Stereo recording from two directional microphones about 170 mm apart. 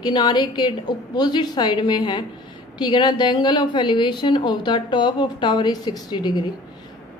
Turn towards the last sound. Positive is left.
turn(degrees=25)  # may be behind; listen again after turning